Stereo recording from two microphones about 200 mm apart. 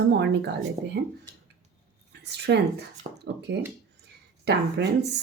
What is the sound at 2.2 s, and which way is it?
Speech, 60° right (ahead or behind).